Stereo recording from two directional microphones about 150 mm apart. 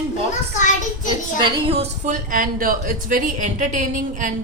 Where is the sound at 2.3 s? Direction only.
70° right (ahead or behind).